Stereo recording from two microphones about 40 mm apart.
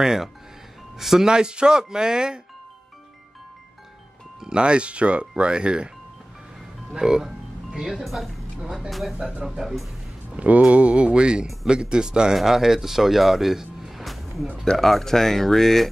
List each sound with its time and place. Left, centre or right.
0.0 s speech: centre
4.4 s speech: right
6.9 s speech: centre
8.0 s speech: centre
10.3 s speech: right; by 15.9 s centre